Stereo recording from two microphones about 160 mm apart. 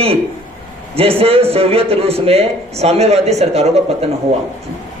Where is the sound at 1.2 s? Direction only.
35° right (ahead or behind).